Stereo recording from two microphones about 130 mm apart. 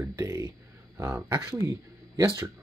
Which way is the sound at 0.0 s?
25° right (ahead or behind).